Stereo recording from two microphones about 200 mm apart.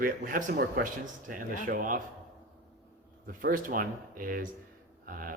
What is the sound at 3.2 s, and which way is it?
Speech, 45° right (ahead or behind).